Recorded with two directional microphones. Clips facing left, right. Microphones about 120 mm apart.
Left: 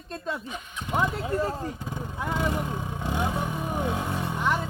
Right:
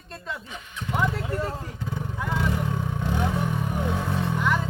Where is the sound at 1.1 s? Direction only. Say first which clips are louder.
Left 2 dB; 25° left (ahead or behind).